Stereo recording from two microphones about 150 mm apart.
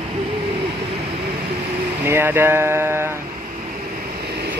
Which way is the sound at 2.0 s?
15° right (ahead or behind).